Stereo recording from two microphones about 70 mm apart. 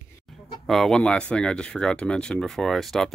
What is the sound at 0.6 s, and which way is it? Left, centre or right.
Speech, centre.